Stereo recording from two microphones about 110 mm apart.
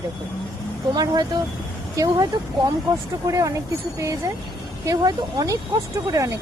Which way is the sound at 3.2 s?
30° right (ahead or behind).